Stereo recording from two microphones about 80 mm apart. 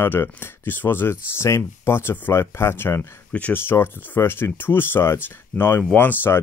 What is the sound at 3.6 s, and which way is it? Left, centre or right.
Speech, left.